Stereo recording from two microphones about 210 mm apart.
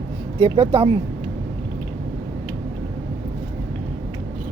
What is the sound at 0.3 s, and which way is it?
Speech, 25° right (ahead or behind).